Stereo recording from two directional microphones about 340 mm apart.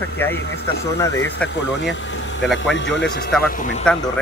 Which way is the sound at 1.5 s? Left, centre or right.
Left.